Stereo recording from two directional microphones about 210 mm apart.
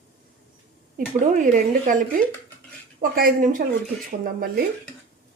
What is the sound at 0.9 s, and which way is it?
Speech, 40° right (ahead or behind).